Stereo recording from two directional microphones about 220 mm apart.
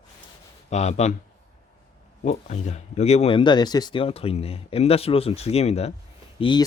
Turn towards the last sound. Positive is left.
turn(degrees=20)  # may be behind; listen again after turning